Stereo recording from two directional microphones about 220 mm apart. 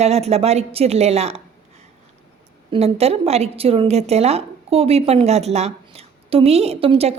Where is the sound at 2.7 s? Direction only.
30° right (ahead or behind).